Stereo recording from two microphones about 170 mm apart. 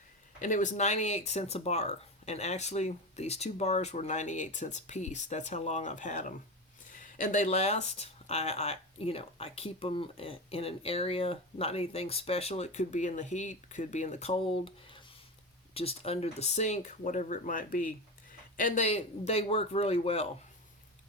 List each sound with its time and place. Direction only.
0.4 s speech: 45° left (ahead or behind)